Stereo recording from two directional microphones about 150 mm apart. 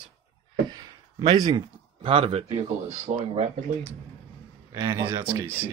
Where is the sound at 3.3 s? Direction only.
45° right (ahead or behind).